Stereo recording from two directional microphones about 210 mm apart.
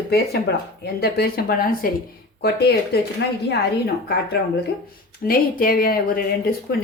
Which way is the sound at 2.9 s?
50° left (ahead or behind).